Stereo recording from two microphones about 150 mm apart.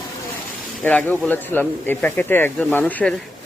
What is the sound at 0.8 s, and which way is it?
Speech, 10° left (ahead or behind).